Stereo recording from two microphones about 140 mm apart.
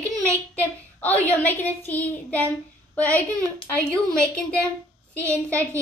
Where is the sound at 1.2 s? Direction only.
10° left (ahead or behind).